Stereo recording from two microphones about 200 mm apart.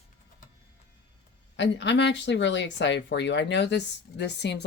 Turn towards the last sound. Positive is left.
turn(degrees=60)  # may be behind; listen again after turning